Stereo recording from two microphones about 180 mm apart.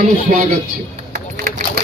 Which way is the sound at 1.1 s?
55° right (ahead or behind).